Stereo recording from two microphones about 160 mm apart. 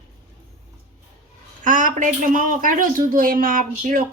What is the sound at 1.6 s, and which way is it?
Speech, 55° right (ahead or behind).